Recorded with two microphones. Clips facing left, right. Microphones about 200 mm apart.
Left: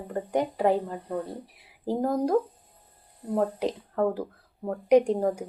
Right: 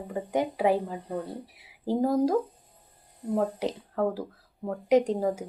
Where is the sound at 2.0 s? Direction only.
5° right (ahead or behind).